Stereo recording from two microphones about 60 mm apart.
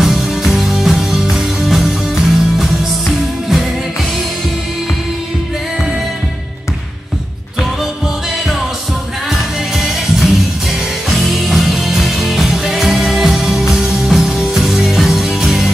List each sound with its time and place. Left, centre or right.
0.0 s music: centre
9.3 s music: centre